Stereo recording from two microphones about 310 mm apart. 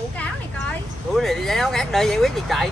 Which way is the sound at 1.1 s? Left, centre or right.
Centre.